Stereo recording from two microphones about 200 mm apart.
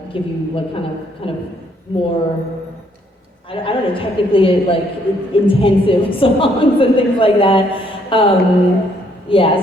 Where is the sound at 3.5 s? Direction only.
25° left (ahead or behind).